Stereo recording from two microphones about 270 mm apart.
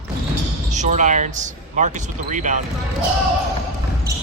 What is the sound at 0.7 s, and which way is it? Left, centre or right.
Speech, right.